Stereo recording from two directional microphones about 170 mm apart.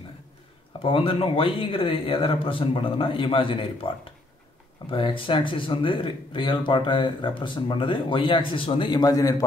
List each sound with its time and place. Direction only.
0.8 s speech: 30° left (ahead or behind)